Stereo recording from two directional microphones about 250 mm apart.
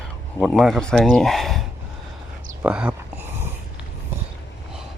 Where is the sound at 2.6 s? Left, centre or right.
Centre.